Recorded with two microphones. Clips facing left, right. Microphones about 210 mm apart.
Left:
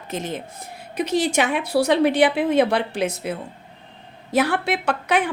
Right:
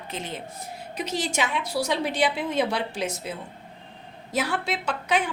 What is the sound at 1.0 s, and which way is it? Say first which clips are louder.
A woman's voice: left 7 dB; 60° left (ahead or behind).